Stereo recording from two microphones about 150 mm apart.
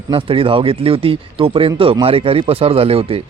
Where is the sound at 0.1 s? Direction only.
35° right (ahead or behind).